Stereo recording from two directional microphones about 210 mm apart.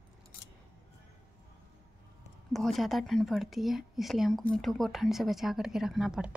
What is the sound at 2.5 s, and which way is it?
Speech, centre (ahead or behind).